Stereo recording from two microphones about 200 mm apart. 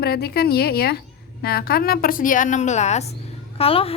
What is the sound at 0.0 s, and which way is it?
A woman's voice, 50° left (ahead or behind).